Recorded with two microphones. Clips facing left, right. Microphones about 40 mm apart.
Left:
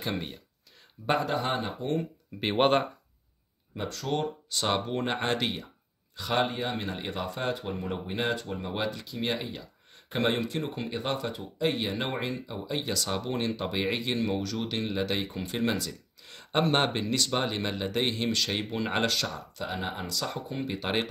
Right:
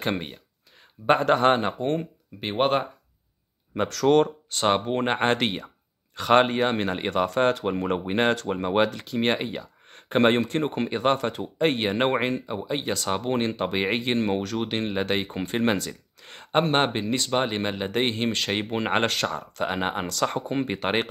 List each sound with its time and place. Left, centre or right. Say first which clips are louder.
0.1 s speech: right 4 dB; right
1.2 s speech: right 9 dB; right
2.4 s speech: right 1 dB; centre
3.7 s speech: right 11 dB; right
4.6 s speech: right 6 dB; right
12.5 s speech: right 4 dB; right